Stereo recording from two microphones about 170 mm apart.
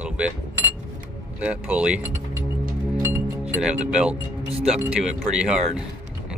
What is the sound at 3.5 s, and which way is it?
Speech, 5° right (ahead or behind).